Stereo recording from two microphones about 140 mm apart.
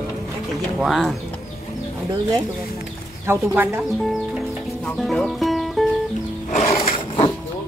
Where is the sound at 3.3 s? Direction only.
15° right (ahead or behind).